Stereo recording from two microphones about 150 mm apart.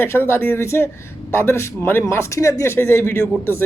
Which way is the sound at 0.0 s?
15° left (ahead or behind).